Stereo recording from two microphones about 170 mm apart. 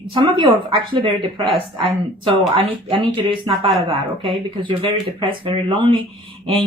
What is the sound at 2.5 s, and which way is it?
A woman's voice, 35° right (ahead or behind).